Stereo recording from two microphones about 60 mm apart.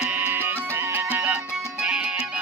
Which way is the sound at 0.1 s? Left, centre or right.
Right.